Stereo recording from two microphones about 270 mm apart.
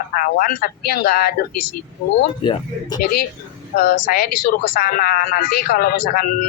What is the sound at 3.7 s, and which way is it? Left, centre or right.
A man's voice, left.